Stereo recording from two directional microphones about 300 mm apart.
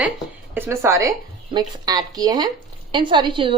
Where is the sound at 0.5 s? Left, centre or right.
Centre.